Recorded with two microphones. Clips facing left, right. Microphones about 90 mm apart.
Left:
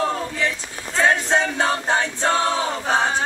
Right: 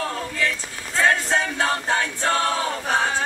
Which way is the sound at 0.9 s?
20° left (ahead or behind).